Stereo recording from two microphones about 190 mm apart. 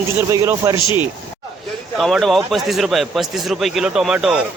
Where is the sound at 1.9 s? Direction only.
Centre (ahead or behind).